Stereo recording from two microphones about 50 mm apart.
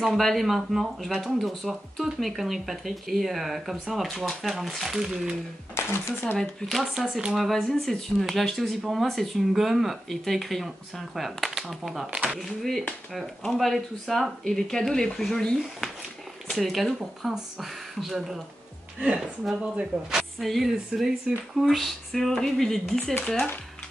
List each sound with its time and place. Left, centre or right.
0.0 s speech: centre
5.8 s a sound: left
6.3 s speech: centre
14.4 s speech: centre
16.5 s speech: centre
18.9 s speech: right
20.2 s speech: centre